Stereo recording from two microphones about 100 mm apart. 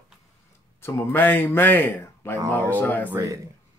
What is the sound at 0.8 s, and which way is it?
Speech, 25° left (ahead or behind).